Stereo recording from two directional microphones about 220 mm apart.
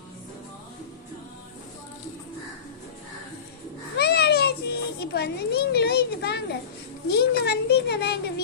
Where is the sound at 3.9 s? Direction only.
45° left (ahead or behind).